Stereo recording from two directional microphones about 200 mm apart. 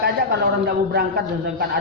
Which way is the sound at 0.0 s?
55° right (ahead or behind).